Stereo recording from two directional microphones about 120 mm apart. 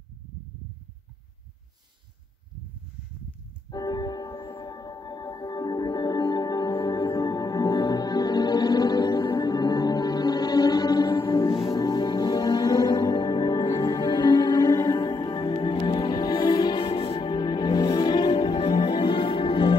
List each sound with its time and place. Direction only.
3.7 s music: 35° left (ahead or behind)